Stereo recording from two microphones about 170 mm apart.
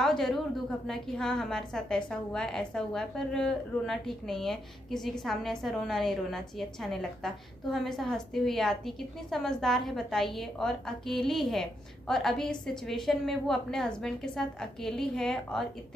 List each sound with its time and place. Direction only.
0.0 s a woman's voice: centre (ahead or behind)